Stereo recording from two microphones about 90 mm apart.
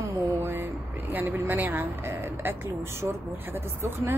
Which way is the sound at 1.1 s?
20° right (ahead or behind).